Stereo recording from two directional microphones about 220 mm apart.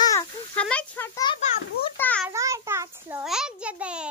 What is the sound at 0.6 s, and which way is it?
A child's voice, 5° left (ahead or behind).